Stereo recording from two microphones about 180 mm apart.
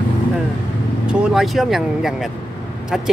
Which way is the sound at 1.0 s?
5° right (ahead or behind).